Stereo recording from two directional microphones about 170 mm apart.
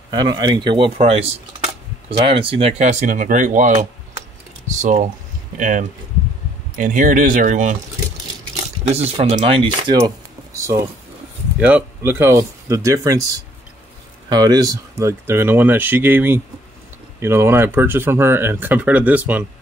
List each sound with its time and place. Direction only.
0.1 s speech: 25° right (ahead or behind); by 7.7 s 50° right (ahead or behind)
8.8 s speech: 40° right (ahead or behind)
9.9 s a sound: 20° right (ahead or behind)
11.6 s speech: 10° right (ahead or behind)